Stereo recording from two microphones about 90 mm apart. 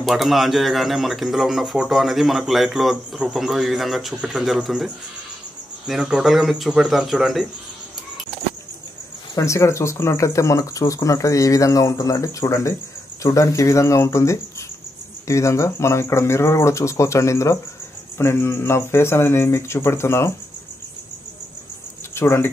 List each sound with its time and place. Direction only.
0.0 s a man's voice: centre (ahead or behind)
9.4 s speech: 35° left (ahead or behind)
22.1 s speech: 25° left (ahead or behind)